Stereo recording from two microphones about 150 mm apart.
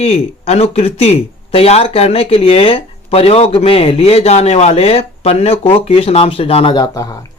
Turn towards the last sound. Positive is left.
turn(degrees=20)  # may be behind; listen again after turning